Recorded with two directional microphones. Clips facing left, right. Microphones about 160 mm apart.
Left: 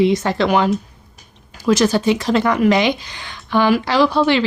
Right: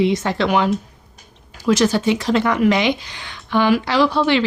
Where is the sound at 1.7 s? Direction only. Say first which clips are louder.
Left 1 dB; 45° left (ahead or behind).